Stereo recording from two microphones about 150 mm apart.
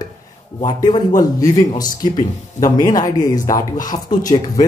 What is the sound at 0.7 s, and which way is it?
Speech, 30° left (ahead or behind).